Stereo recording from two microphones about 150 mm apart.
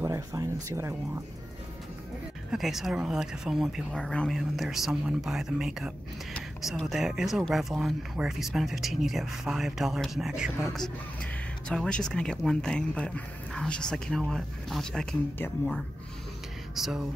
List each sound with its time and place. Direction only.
0.0 s speech: 20° right (ahead or behind)
2.5 s speech: centre (ahead or behind)